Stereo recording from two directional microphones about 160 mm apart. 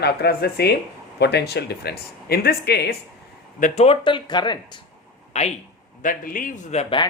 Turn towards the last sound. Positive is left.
turn(degrees=40)  # may be behind; listen again after turning